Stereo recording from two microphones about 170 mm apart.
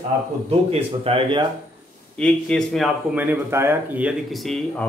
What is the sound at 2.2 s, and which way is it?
A man's voice, 5° left (ahead or behind).